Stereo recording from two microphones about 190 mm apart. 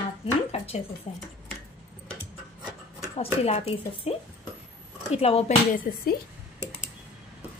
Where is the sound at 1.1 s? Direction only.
35° left (ahead or behind).